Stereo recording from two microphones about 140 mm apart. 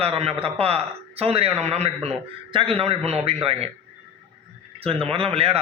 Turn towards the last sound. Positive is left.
turn(degrees=-45)  # may be behind; listen again after turning